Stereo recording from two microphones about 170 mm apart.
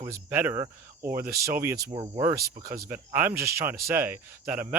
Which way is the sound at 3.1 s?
10° right (ahead or behind).